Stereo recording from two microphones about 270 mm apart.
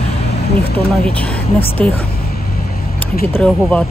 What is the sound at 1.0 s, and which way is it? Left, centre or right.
Speech, centre.